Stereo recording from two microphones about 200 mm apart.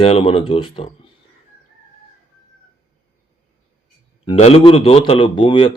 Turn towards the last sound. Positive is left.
turn(degrees=25)  # may be behind; listen again after turning